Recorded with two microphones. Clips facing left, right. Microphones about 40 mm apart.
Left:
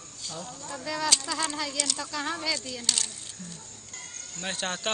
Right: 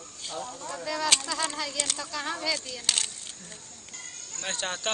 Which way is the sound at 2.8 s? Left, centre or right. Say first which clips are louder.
Right 1 dB; right.